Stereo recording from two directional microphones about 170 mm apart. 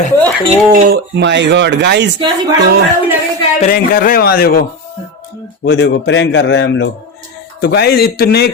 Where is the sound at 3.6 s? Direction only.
55° left (ahead or behind).